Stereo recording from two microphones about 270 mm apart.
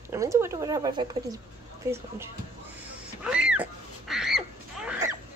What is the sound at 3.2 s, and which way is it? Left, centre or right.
Duck, centre.